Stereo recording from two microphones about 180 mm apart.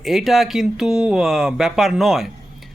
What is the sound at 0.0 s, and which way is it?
Speech, centre (ahead or behind).